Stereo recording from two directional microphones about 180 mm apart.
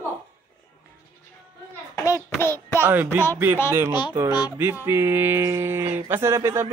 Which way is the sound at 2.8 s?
10° right (ahead or behind).